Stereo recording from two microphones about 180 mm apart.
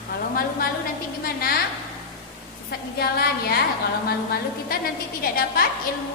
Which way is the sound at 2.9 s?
60° left (ahead or behind).